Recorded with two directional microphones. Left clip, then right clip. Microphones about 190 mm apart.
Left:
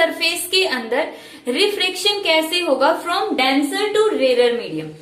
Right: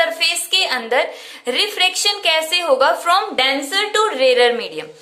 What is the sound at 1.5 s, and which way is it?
A woman's voice, 35° right (ahead or behind).